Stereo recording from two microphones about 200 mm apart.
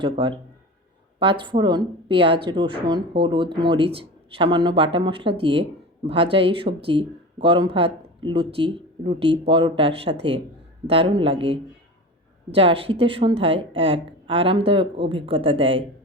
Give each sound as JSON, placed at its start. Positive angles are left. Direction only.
{"t": 0.0, "sound": "speech", "side_deg": -25}